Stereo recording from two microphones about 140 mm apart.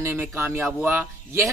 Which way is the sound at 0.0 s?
15° right (ahead or behind).